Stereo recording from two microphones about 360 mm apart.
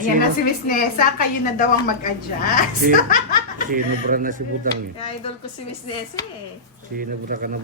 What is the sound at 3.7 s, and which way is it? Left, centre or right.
Speech, right.